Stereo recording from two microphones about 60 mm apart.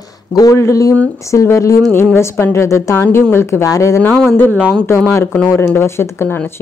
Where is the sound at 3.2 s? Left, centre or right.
Left.